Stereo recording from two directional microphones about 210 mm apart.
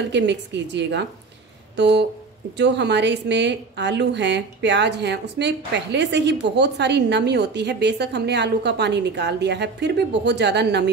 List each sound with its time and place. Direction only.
0.1 s a woman's voice: 55° right (ahead or behind)